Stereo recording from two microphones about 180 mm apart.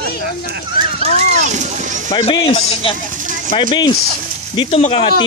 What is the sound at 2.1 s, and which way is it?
Speech, 25° left (ahead or behind).